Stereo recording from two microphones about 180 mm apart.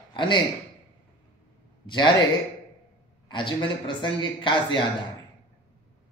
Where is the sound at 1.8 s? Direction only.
25° left (ahead or behind).